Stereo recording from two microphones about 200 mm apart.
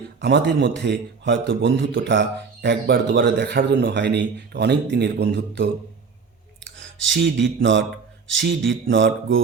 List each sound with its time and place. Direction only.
0.2 s a man's voice: 60° right (ahead or behind)
6.7 s speech: 65° right (ahead or behind)